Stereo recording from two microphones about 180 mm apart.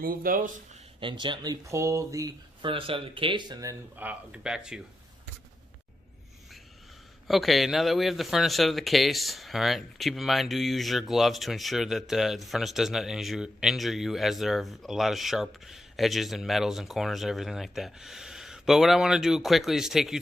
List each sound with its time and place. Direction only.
0.0 s speech: 50° right (ahead or behind)
0.9 s speech: 25° right (ahead or behind); by 4.8 s 5° right (ahead or behind)
7.3 s speech: centre (ahead or behind)